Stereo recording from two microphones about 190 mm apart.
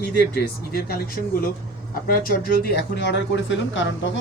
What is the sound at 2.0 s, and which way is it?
Speech, 50° left (ahead or behind).